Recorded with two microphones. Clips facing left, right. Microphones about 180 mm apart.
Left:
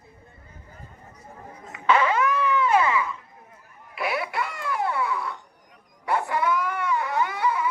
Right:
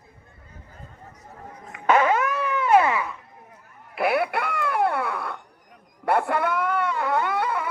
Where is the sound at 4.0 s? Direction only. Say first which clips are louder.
Right 5 dB; 60° right (ahead or behind).